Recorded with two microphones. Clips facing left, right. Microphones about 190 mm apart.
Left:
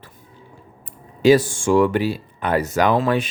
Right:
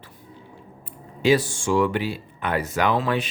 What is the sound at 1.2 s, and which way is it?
Speech, 45° left (ahead or behind).